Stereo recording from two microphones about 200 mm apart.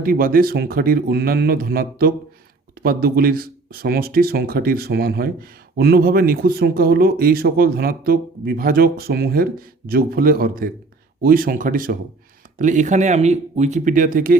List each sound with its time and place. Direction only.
0.0 s speech: 45° right (ahead or behind)